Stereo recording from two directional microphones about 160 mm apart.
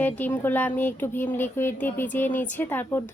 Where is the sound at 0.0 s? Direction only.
10° left (ahead or behind).